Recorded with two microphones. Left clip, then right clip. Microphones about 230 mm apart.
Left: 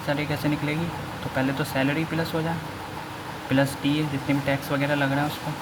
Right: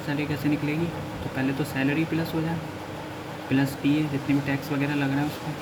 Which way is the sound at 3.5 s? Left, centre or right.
Left.